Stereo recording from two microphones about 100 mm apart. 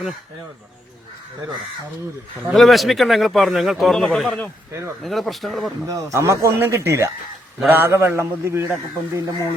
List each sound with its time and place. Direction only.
2.5 s a man's voice: centre (ahead or behind)
5.9 s a man's voice: 30° right (ahead or behind)